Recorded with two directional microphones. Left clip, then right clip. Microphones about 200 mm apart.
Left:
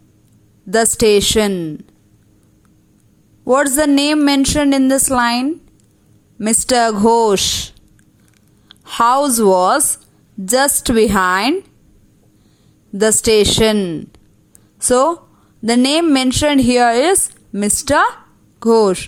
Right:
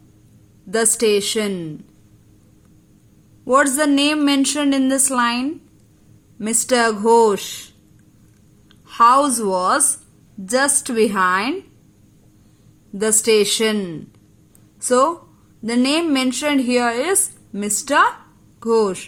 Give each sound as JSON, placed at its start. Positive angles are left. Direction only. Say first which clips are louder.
{"t": 0.7, "sound": "a woman's voice", "louder": "left 5 dB", "side_deg": 30}
{"t": 3.4, "sound": "a woman's voice", "louder": "left 2 dB", "side_deg": 25}
{"t": 8.7, "sound": "a woman's voice", "louder": "even", "side_deg": 35}
{"t": 13.0, "sound": "speech", "louder": "left 4 dB", "side_deg": 30}
{"t": 13.7, "sound": "a woman's voice", "louder": "left 7 dB", "side_deg": 20}